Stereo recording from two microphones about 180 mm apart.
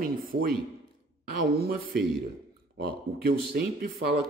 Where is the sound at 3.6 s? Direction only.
60° right (ahead or behind).